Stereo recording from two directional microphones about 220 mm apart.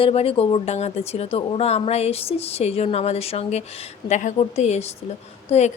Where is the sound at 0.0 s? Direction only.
25° left (ahead or behind).